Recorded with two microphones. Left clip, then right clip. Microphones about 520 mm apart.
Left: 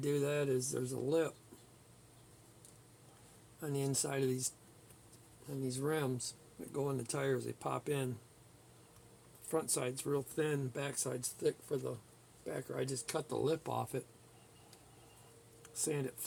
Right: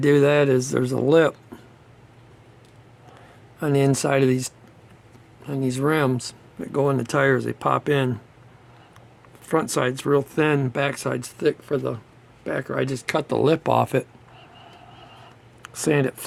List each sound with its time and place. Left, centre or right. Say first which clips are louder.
0.0 s speech: right 18 dB; centre
3.6 s speech: right 18 dB; centre
9.5 s speech: right 15 dB; left
15.6 s speech: right 18 dB; centre